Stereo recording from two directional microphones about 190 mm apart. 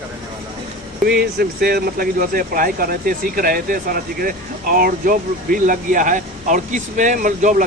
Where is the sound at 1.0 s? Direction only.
55° right (ahead or behind).